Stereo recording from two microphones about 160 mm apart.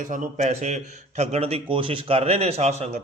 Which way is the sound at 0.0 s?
55° right (ahead or behind).